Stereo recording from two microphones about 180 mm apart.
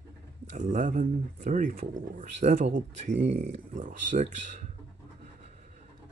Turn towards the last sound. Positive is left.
turn(degrees=-40)  # may be behind; listen again after turning